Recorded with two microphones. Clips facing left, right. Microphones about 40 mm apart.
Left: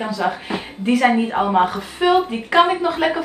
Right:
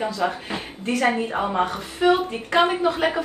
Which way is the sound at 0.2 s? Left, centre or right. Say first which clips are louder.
Left 3 dB; left.